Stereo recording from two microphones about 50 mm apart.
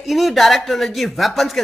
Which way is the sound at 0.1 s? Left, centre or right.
Centre.